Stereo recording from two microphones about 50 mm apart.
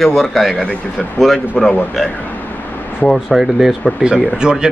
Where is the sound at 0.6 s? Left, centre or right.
Left.